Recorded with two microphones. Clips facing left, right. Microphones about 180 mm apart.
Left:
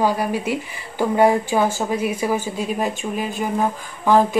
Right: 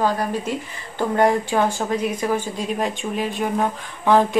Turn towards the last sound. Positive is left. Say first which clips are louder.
# left 1 dB
turn(degrees=5)  # may be behind; listen again after turning